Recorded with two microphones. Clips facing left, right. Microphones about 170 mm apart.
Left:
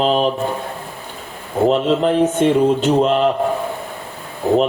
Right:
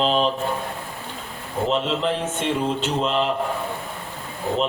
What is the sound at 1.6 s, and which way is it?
Speech, 50° left (ahead or behind).